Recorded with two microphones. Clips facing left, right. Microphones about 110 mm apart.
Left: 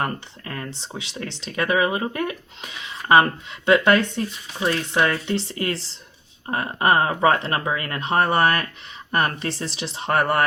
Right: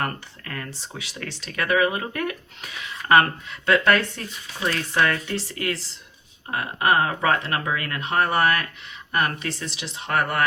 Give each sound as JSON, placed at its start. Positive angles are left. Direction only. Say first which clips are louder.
{"t": 0.0, "sound": "speech", "louder": "left 2 dB", "side_deg": 25}